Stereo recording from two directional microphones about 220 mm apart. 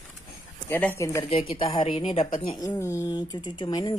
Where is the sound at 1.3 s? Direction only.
25° left (ahead or behind).